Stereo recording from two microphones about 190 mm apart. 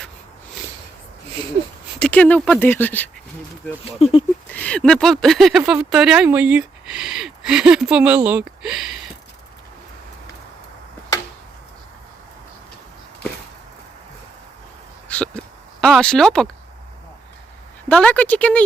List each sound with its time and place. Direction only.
2.0 s speech: 5° left (ahead or behind)
3.9 s speech: 30° left (ahead or behind)
4.5 s speech: 5° left (ahead or behind)
15.8 s speech: 5° left (ahead or behind)
17.8 s speech: 5° left (ahead or behind)